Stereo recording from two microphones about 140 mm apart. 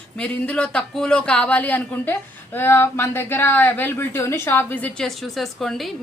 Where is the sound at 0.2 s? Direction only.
10° left (ahead or behind).